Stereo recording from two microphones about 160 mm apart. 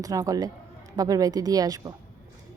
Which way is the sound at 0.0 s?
20° right (ahead or behind).